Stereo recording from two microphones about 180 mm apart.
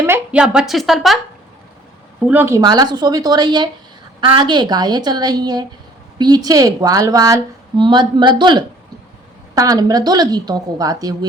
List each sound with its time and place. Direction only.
0.0 s a woman's voice: 10° right (ahead or behind)
2.2 s a woman's voice: 10° right (ahead or behind)